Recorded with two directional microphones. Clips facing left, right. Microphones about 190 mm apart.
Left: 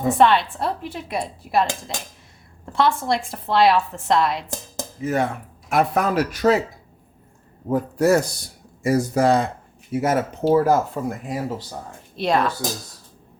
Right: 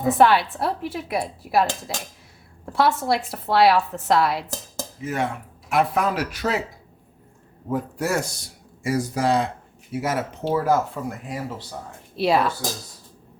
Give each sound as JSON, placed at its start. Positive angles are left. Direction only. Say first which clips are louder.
{"t": 0.2, "sound": "a woman's voice", "louder": "even", "side_deg": -5}
{"t": 5.0, "sound": "speech", "louder": "left 4 dB", "side_deg": 40}
{"t": 7.7, "sound": "speech", "louder": "left 7 dB", "side_deg": 40}
{"t": 12.1, "sound": "a woman's voice", "louder": "even", "side_deg": -5}